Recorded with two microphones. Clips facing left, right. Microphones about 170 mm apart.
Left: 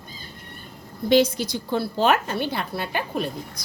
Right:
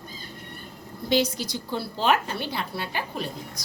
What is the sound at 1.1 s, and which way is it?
A woman's voice, 55° left (ahead or behind).